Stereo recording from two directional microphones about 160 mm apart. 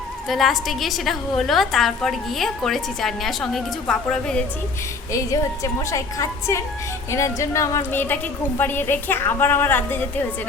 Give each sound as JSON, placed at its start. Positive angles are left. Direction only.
{"t": 0.3, "sound": "a woman's voice", "side_deg": 0}
{"t": 5.1, "sound": "a woman's voice", "side_deg": 20}